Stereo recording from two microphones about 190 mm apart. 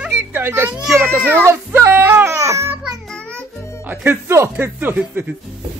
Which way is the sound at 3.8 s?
10° right (ahead or behind).